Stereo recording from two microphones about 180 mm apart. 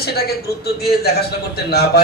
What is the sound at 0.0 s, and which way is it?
Speech, 60° left (ahead or behind).